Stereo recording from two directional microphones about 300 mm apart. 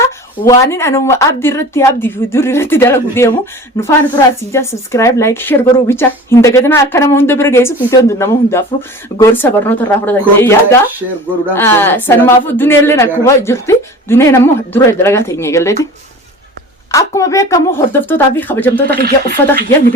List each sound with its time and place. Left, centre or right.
0.4 s speech: centre
16.9 s speech: centre
19.0 s speech: right